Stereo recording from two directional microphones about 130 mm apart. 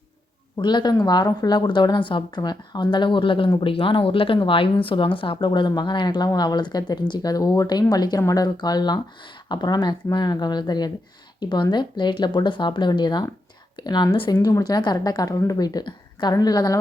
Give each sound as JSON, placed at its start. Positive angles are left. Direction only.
{"t": 0.6, "sound": "a woman's voice", "side_deg": 35}